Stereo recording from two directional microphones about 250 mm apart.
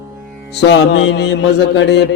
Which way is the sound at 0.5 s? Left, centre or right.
Left.